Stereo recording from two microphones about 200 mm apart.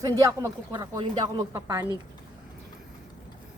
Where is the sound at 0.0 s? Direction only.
15° right (ahead or behind).